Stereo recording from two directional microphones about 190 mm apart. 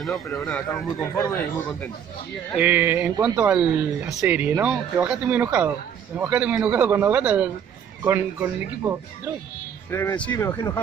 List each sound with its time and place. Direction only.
0.3 s speech: 10° left (ahead or behind)
2.5 s speech: 10° right (ahead or behind)
9.8 s speech: 10° left (ahead or behind)